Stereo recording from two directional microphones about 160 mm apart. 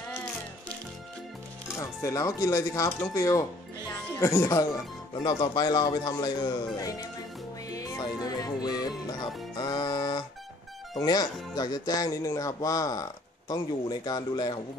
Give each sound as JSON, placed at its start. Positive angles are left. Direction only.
{"t": 1.8, "sound": "speech", "side_deg": 20}
{"t": 7.7, "sound": "music", "side_deg": 20}
{"t": 9.6, "sound": "speech", "side_deg": 25}